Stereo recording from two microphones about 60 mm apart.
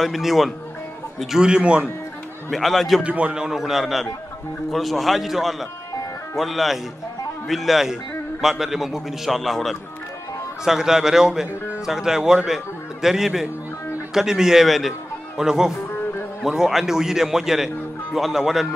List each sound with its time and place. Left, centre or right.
0.0 s a man's voice: centre
1.3 s a man's voice: centre
2.5 s a man's voice: centre
3.0 s a man's voice: right
3.3 s a man's voice: centre